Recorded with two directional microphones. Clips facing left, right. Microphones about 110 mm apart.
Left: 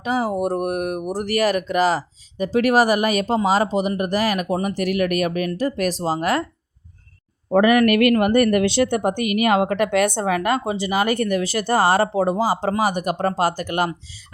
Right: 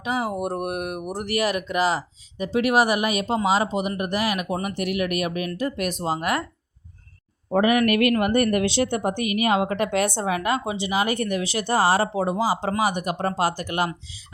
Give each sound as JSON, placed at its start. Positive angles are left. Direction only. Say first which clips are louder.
{"t": 0.0, "sound": "a woman's voice", "louder": "left 4 dB", "side_deg": 40}
{"t": 7.5, "sound": "a woman's voice", "louder": "left 4 dB", "side_deg": 60}